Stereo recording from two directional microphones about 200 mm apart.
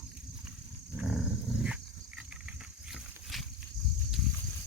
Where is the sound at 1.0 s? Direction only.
Centre (ahead or behind).